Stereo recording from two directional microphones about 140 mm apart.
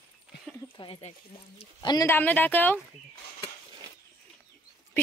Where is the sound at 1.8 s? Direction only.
30° left (ahead or behind).